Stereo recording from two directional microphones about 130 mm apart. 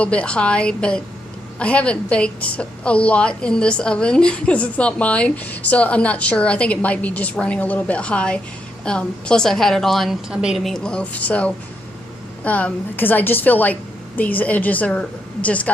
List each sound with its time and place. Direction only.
0.0 s a woman's voice: 10° left (ahead or behind)